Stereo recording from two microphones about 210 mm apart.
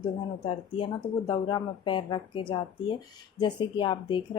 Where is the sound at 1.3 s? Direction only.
20° left (ahead or behind).